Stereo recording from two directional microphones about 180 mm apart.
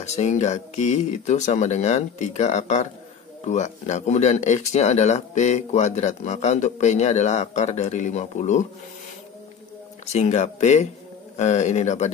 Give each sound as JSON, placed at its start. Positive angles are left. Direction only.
{"t": 0.0, "sound": "speech", "side_deg": 40}
{"t": 10.1, "sound": "speech", "side_deg": 40}